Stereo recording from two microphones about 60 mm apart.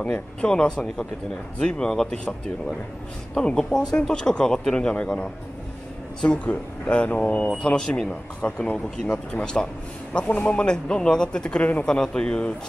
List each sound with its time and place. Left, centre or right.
0.0 s a man's voice: centre